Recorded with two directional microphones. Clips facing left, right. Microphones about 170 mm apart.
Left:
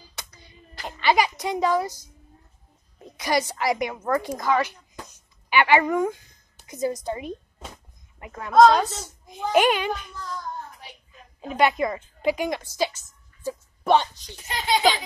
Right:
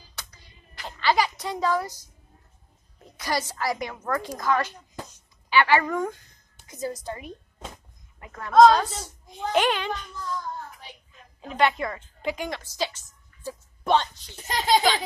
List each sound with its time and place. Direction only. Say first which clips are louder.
0.8 s a child's voice: left 2 dB; 15° left (ahead or behind)
3.2 s a woman's voice: left 4 dB; 15° left (ahead or behind)
8.5 s a woman's voice: even; 5° left (ahead or behind)
11.4 s a woman's voice: left 2 dB; 10° left (ahead or behind)
13.4 s a sound: left 5 dB; 10° left (ahead or behind)
14.5 s a child's voice: right 3 dB; 40° right (ahead or behind)